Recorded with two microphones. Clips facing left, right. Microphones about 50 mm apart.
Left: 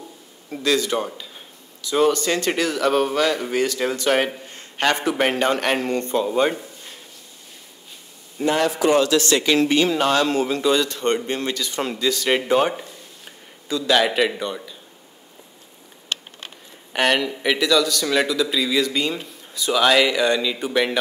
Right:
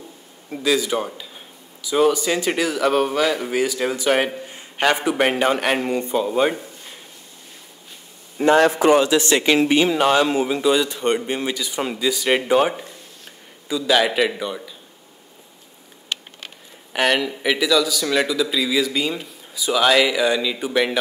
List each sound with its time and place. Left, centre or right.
0.5 s speech: centre
8.4 s a man's voice: right
8.9 s speech: centre
16.9 s speech: centre